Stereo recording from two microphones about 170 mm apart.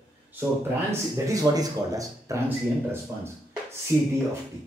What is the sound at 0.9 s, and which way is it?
Speech, 20° right (ahead or behind).